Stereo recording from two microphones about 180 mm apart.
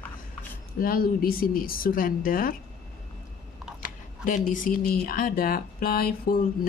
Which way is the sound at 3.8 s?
50° left (ahead or behind).